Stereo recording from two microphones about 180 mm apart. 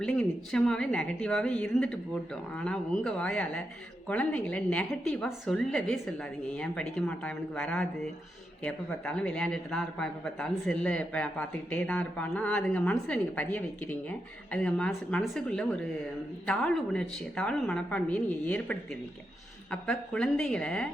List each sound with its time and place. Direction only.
0.0 s a woman's voice: 5° left (ahead or behind)